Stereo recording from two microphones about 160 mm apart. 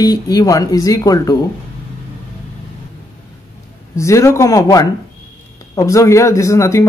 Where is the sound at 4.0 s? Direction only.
20° left (ahead or behind).